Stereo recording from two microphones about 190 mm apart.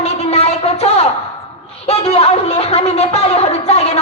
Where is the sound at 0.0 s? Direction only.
35° left (ahead or behind).